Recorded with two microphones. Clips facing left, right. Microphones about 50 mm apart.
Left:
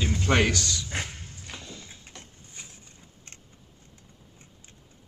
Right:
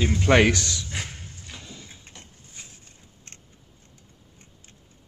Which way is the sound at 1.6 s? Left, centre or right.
Centre.